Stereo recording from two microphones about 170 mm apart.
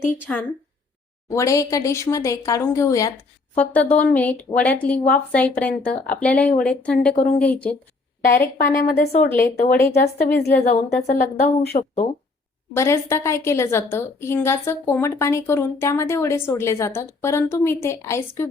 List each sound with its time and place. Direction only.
0.0 s a woman's voice: 10° left (ahead or behind)
9.4 s a woman's voice: 55° left (ahead or behind)
11.0 s speech: 40° left (ahead or behind)
12.7 s a woman's voice: 15° left (ahead or behind)